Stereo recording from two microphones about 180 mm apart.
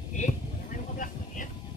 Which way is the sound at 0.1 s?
45° left (ahead or behind).